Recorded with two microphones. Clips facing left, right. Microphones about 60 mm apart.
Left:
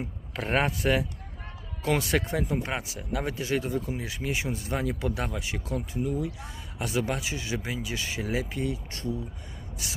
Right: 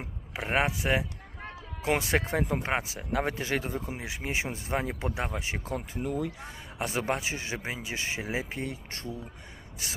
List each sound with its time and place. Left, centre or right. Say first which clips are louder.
0.0 s speech: left 3 dB; centre
1.8 s speech: left 1 dB; right
6.0 s speech: left 2 dB; right
6.4 s speech: right 1 dB; right